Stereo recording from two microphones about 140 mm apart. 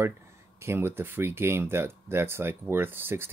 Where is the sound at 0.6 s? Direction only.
20° right (ahead or behind).